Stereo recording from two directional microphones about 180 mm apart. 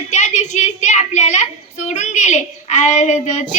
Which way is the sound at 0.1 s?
40° left (ahead or behind).